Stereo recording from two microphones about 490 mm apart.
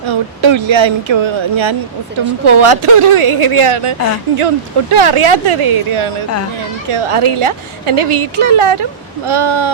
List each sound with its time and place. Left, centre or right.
0.1 s speech: right
2.6 s a woman's voice: right